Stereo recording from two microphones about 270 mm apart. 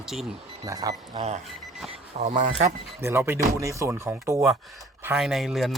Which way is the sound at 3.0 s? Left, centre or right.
Centre.